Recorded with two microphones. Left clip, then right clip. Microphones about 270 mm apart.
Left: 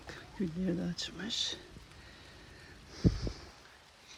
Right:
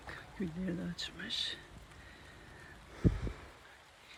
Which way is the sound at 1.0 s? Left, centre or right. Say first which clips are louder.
Left 2 dB; centre.